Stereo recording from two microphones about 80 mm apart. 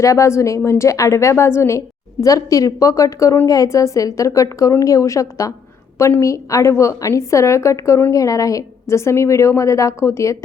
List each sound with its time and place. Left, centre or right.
0.0 s a woman's voice: left
2.2 s a woman's voice: left